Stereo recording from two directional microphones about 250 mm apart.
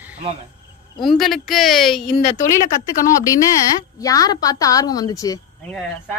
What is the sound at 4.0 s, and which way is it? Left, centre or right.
Speech, centre.